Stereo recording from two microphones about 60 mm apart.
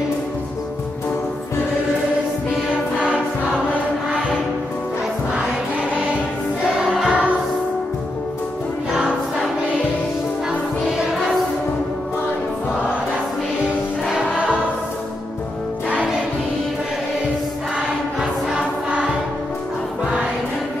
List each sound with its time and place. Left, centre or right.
5.3 s music: centre
6.6 s choir: centre
8.9 s choir: centre
14.1 s choir: centre
17.7 s choir: centre